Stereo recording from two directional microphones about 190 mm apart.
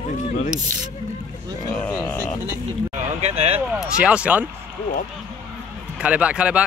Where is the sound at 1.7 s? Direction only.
10° left (ahead or behind).